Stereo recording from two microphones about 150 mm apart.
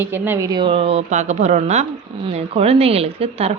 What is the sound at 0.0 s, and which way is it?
Speech, 15° right (ahead or behind).